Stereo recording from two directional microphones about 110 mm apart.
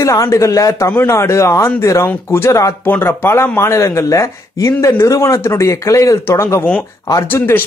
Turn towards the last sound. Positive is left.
turn(degrees=20)  # may be behind; listen again after turning